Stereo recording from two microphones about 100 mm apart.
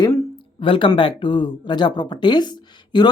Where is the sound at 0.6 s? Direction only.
60° left (ahead or behind).